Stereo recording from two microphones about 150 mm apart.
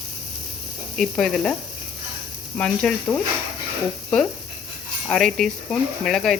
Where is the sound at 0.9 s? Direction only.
Centre (ahead or behind).